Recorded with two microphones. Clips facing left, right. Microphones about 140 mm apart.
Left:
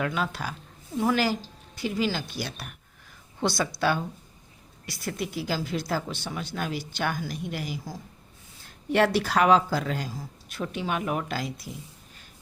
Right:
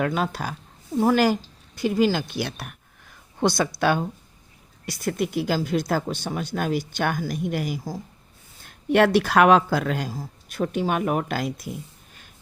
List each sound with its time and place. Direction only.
0.0 s speech: 45° right (ahead or behind)
8.6 s speech: 60° right (ahead or behind)
10.1 s speech: 45° right (ahead or behind)